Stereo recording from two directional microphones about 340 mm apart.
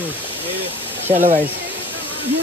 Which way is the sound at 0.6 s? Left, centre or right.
Centre.